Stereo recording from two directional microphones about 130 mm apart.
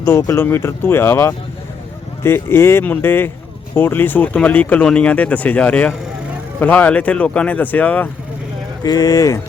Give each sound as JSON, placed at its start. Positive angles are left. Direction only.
{"t": 0.0, "sound": "speech", "side_deg": 20}
{"t": 8.8, "sound": "speech", "side_deg": 30}